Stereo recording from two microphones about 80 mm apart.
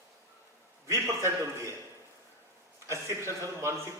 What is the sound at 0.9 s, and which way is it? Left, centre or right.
Speech, right.